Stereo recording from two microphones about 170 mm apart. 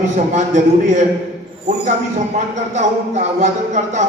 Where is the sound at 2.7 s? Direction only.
45° right (ahead or behind).